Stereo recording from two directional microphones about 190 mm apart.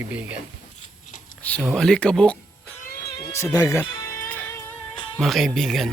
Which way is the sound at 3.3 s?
15° left (ahead or behind).